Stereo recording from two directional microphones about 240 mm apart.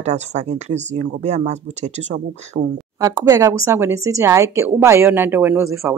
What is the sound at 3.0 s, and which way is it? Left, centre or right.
Speech, centre.